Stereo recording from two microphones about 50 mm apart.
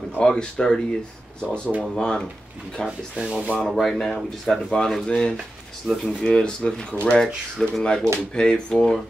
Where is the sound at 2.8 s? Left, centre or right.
Centre.